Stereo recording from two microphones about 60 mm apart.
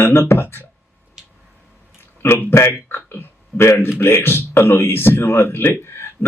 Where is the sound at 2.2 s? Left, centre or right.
Left.